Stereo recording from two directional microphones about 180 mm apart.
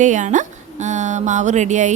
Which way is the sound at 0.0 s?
45° right (ahead or behind).